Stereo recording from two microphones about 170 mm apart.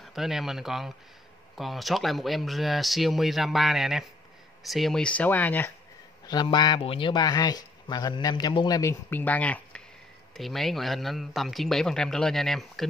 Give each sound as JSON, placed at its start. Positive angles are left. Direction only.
{"t": 0.0, "sound": "speech", "side_deg": 0}
{"t": 6.2, "sound": "a man's voice", "side_deg": 25}